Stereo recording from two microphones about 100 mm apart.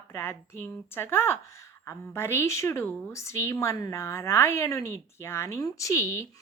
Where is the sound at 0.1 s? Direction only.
25° left (ahead or behind).